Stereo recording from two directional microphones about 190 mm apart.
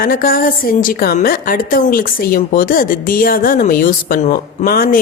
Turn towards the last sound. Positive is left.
turn(degrees=50)  # may be behind; listen again after turning